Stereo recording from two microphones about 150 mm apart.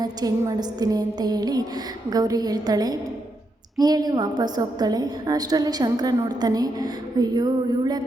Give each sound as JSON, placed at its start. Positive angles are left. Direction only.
{"t": 0.0, "sound": "a woman's voice", "side_deg": -25}